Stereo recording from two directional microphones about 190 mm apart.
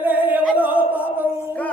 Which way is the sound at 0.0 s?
10° right (ahead or behind).